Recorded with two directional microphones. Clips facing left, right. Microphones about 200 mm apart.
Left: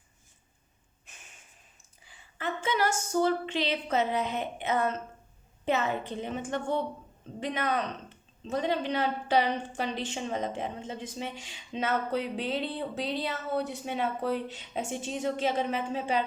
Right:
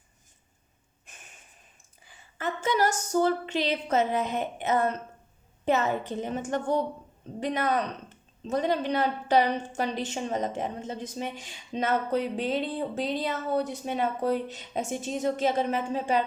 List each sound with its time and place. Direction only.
2.0 s a woman's voice: 45° right (ahead or behind)